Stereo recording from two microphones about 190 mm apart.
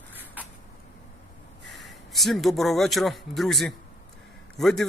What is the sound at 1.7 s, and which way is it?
A man's voice, centre (ahead or behind).